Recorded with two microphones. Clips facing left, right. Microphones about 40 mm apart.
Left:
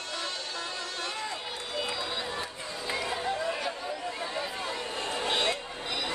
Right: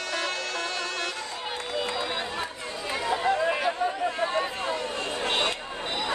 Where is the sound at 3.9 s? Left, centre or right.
Right.